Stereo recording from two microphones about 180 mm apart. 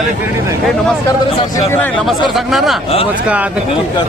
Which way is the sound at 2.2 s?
Centre (ahead or behind).